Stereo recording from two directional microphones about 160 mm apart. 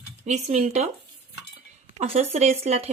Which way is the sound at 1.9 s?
40° right (ahead or behind).